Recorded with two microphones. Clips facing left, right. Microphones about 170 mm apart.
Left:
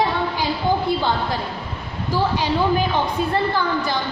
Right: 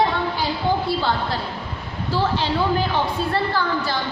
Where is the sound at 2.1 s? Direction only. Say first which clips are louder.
Left 1 dB; 15° left (ahead or behind).